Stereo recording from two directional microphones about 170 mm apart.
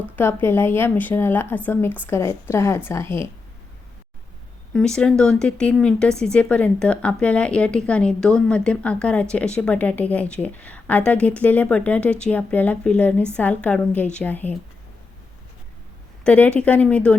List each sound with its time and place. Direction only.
0.2 s a woman's voice: 15° left (ahead or behind)
4.7 s a woman's voice: 5° left (ahead or behind)
16.2 s a woman's voice: 10° left (ahead or behind)